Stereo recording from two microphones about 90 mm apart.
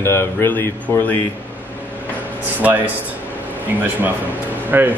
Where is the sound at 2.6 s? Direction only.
15° right (ahead or behind).